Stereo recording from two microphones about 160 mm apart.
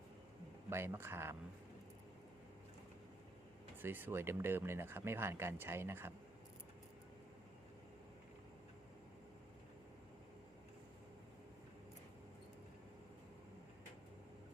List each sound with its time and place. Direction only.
0.7 s speech: 15° right (ahead or behind)
3.8 s speech: 10° right (ahead or behind)